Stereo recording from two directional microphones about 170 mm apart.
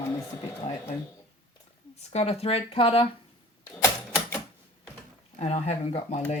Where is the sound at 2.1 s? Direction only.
40° left (ahead or behind).